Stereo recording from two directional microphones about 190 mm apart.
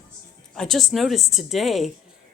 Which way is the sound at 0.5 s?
Centre (ahead or behind).